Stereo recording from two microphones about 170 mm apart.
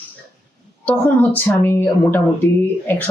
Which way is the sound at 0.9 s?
10° left (ahead or behind).